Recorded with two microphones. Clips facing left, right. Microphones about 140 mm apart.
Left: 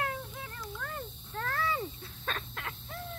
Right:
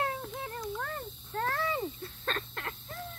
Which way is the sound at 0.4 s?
35° right (ahead or behind).